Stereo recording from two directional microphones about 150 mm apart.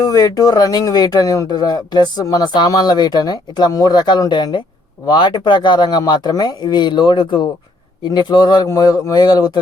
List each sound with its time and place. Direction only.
0.0 s speech: 25° left (ahead or behind)